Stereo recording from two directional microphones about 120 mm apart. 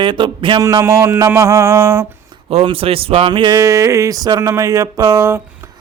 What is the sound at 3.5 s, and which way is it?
Speech, 25° right (ahead or behind).